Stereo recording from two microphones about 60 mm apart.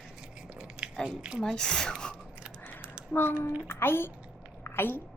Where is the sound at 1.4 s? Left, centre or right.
Centre.